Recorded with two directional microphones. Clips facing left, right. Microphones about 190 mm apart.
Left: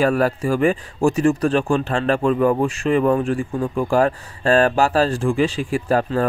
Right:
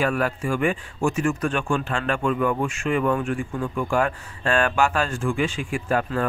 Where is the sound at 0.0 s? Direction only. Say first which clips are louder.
Left 6 dB; 40° left (ahead or behind).